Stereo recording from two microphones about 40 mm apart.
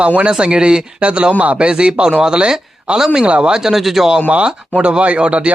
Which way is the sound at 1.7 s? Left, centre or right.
Centre.